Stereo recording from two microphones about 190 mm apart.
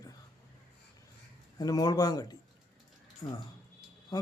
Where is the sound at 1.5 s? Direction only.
20° left (ahead or behind).